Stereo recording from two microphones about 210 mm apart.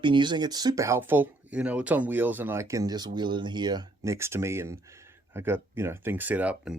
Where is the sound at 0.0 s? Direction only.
20° right (ahead or behind).